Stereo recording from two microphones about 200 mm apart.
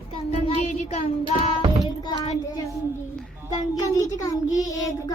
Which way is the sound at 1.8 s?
20° left (ahead or behind).